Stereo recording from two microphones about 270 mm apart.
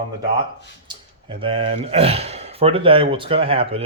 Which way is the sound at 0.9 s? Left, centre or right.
Centre.